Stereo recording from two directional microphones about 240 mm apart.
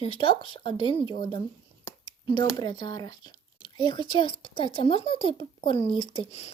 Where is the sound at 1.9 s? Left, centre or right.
Centre.